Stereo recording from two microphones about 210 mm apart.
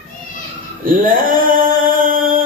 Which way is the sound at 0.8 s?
40° right (ahead or behind).